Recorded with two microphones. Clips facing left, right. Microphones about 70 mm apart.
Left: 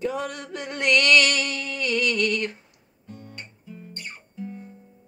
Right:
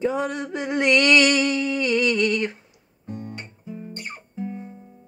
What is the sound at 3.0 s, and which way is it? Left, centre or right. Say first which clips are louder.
Guitar: right 7 dB; right.